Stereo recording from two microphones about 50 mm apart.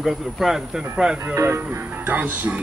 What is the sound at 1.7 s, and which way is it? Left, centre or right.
Speech, right.